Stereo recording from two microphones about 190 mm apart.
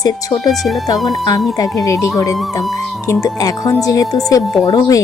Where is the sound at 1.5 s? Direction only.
20° left (ahead or behind).